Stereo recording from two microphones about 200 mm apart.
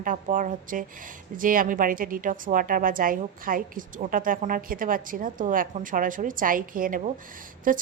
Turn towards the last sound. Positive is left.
turn(degrees=-45)  # may be behind; listen again after turning